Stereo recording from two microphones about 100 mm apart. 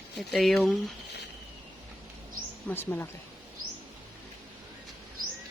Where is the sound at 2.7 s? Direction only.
20° left (ahead or behind).